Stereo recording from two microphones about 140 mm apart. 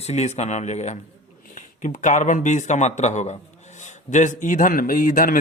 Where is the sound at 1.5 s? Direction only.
65° left (ahead or behind).